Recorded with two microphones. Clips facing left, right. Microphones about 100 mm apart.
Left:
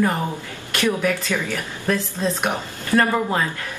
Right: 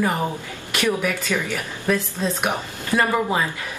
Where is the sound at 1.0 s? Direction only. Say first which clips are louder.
Left 1 dB; 15° right (ahead or behind).